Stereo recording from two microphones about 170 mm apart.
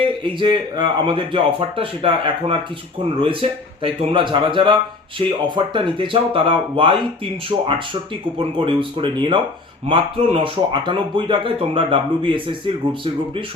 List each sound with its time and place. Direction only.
0.0 s speech: 30° right (ahead or behind)
3.8 s speech: 30° right (ahead or behind)